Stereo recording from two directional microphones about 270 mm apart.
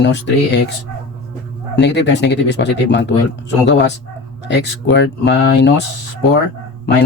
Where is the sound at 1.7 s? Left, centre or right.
Left.